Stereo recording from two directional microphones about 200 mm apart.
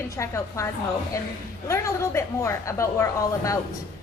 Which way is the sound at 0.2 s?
15° left (ahead or behind).